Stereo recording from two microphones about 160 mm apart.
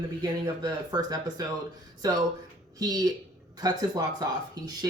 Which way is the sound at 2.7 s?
25° right (ahead or behind).